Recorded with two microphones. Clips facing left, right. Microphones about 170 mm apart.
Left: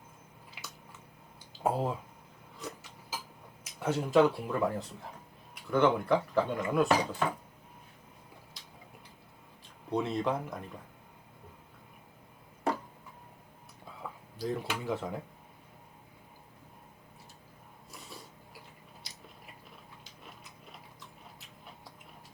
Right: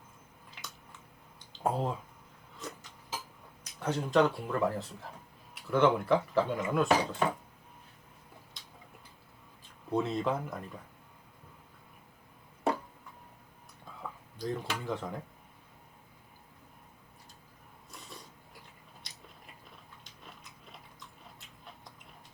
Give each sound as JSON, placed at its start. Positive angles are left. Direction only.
{"t": 0.6, "sound": "a sound", "side_deg": 5}
{"t": 1.6, "sound": "speech", "side_deg": 5}
{"t": 2.6, "sound": "a sound", "side_deg": 0}
{"t": 3.6, "sound": "speech", "side_deg": 10}
{"t": 8.6, "sound": "tick-tock", "side_deg": 0}
{"t": 9.9, "sound": "speech", "side_deg": 0}
{"t": 14.3, "sound": "speech", "side_deg": 5}
{"t": 18.1, "sound": "mechanisms", "side_deg": 5}